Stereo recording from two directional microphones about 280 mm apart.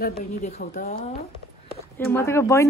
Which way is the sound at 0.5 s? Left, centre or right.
Left.